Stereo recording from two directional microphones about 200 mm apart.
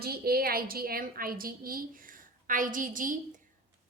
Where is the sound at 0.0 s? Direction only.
50° right (ahead or behind).